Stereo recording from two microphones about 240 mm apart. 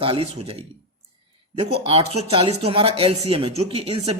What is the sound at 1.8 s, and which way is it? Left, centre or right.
Speech, right.